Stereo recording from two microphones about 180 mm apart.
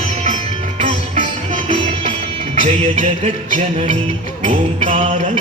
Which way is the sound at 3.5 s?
45° right (ahead or behind).